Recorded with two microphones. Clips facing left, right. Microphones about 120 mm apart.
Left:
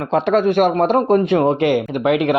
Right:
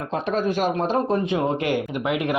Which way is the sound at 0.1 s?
80° left.